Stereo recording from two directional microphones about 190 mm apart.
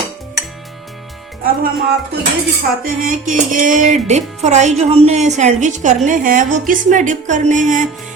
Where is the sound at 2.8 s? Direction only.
45° right (ahead or behind).